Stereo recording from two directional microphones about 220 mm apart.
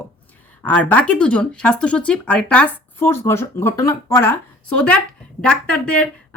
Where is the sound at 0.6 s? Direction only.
5° left (ahead or behind).